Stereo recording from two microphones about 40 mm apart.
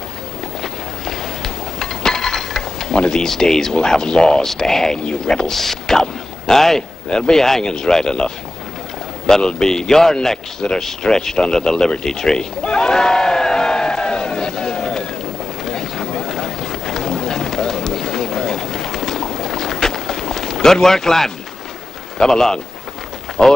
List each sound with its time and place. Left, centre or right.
0.6 s a sound: centre
3.1 s a man's voice: centre
5.5 s a man's voice: centre
9.4 s speech: left
12.0 s a sound: centre
22.2 s speech: centre